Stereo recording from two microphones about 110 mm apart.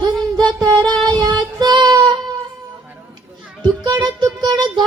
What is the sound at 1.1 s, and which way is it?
Child singing, 40° right (ahead or behind).